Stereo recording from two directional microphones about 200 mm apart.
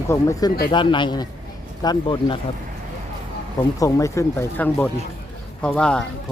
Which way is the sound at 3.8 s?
15° left (ahead or behind).